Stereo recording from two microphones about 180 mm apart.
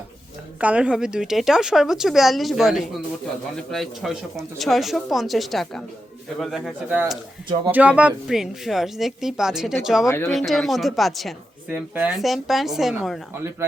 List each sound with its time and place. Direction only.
0.6 s a woman's voice: 5° right (ahead or behind)
10.1 s speech: 15° left (ahead or behind)
10.3 s a woman's voice: centre (ahead or behind)